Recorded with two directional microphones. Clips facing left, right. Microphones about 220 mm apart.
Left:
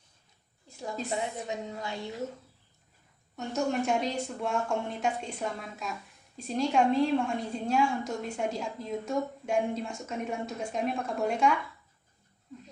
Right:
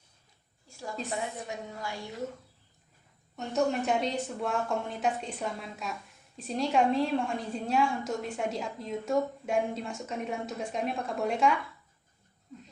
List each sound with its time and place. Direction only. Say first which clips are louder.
0.7 s a sound: left 2 dB; 20° left (ahead or behind)
1.1 s a woman's voice: left 3 dB; 20° left (ahead or behind)
3.3 s speech: right 1 dB; centre (ahead or behind)